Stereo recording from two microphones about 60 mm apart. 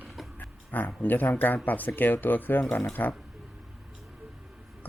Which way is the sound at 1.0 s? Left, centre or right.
Left.